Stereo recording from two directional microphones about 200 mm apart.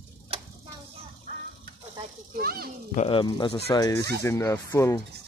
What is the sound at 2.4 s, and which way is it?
Speech, 50° right (ahead or behind).